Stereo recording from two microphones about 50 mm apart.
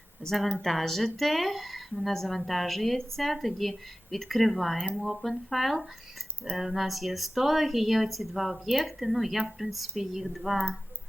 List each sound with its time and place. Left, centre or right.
0.2 s speech: centre